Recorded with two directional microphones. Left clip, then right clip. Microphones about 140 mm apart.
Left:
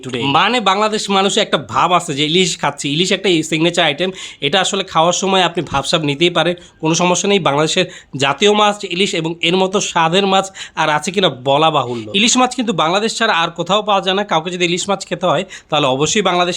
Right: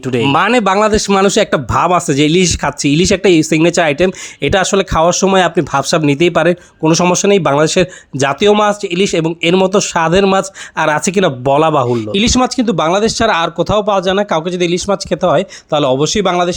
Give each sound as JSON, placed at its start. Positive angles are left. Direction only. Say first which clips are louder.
{"t": 0.0, "sound": "speech", "louder": "right 2 dB", "side_deg": -40}
{"t": 6.8, "sound": "speech", "louder": "right 4 dB", "side_deg": -35}